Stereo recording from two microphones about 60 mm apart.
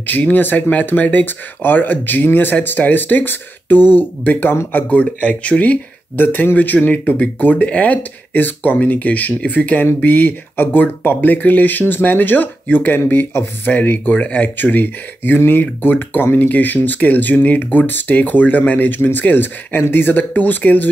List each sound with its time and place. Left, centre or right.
0.0 s speech: left